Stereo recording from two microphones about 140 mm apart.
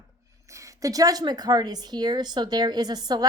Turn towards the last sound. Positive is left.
turn(degrees=-30)  # may be behind; listen again after turning